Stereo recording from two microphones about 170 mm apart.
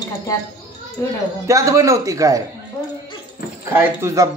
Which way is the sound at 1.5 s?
20° right (ahead or behind).